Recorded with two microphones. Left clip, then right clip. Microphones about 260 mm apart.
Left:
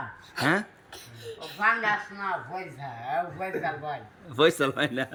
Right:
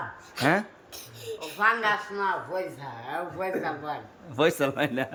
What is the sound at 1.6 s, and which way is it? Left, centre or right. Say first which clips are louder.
A man's voice: right 1 dB; centre.